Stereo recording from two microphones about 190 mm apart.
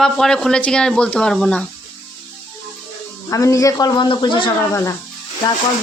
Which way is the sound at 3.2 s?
15° left (ahead or behind).